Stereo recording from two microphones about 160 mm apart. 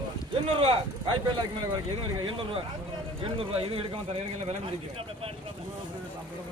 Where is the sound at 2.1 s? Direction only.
30° right (ahead or behind).